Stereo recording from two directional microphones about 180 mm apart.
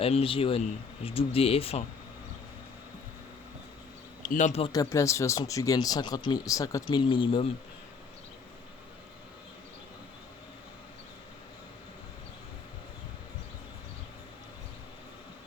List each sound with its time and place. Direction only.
0.0 s speech: 30° left (ahead or behind)
4.2 s a man's voice: 45° left (ahead or behind)
4.6 s speech: 20° left (ahead or behind)